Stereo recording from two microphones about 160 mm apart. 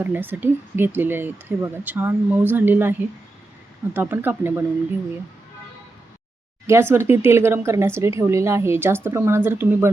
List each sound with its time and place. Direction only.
0.0 s speech: 10° right (ahead or behind)
3.9 s speech: 10° right (ahead or behind)
6.7 s speech: 15° right (ahead or behind)